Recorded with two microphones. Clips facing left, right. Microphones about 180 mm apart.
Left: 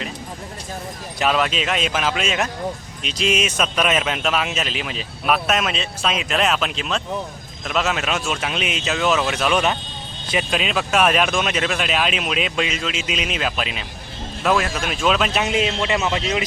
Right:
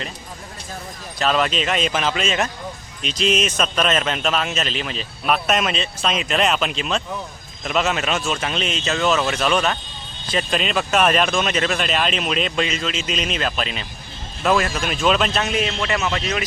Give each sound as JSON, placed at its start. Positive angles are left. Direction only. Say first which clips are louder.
{"t": 1.2, "sound": "a man's voice", "louder": "even", "side_deg": 5}
{"t": 15.3, "sound": "a man's voice", "louder": "left 2 dB", "side_deg": 15}